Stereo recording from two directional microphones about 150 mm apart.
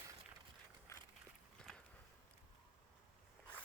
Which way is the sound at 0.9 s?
20° left (ahead or behind).